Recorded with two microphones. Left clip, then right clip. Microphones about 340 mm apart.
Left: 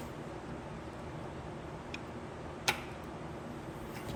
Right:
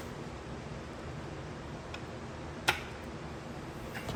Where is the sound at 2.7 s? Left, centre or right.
Centre.